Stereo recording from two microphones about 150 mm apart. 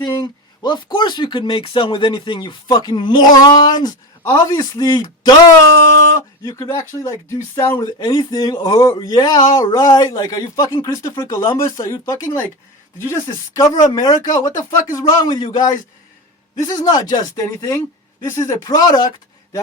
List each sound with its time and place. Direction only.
0.0 s speech: 25° left (ahead or behind)